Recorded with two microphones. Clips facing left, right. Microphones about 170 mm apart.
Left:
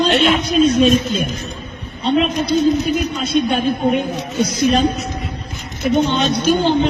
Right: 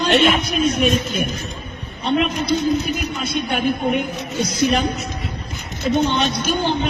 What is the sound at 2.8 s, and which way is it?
A man's voice, 25° left (ahead or behind).